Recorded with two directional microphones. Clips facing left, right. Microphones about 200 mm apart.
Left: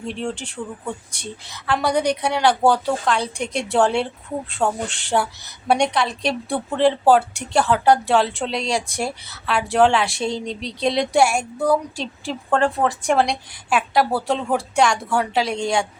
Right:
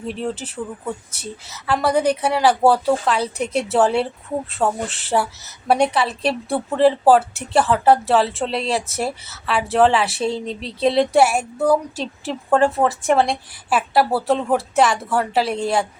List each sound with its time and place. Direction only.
0.0 s speech: 5° right (ahead or behind)